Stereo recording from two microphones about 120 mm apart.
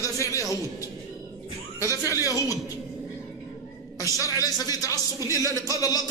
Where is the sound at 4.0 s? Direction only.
30° left (ahead or behind).